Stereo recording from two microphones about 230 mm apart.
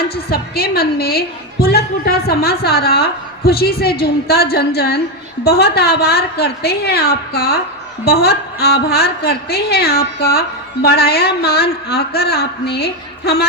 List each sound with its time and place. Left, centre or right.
0.1 s a woman's voice: left